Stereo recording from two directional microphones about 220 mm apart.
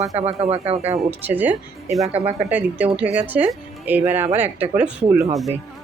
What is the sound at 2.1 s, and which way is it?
Speech, 30° right (ahead or behind).